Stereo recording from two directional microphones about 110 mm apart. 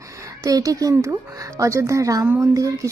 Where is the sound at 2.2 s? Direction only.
20° right (ahead or behind).